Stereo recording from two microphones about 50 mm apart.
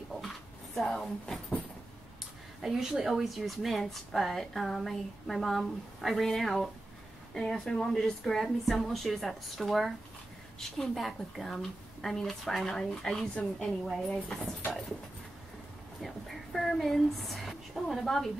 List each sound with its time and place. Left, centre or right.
0.7 s a woman's voice: centre
2.6 s a woman's voice: centre
13.3 s a woman's voice: left
13.8 s a woman's voice: centre
16.0 s speech: centre